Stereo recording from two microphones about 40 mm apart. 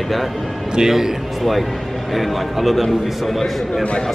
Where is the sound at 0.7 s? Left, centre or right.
Centre.